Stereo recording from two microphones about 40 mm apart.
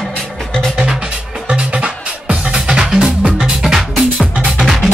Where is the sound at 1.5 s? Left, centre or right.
Right.